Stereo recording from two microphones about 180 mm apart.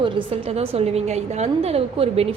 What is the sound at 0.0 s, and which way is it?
A woman's voice, 30° right (ahead or behind).